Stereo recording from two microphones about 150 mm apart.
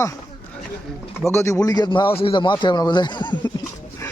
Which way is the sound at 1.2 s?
20° left (ahead or behind).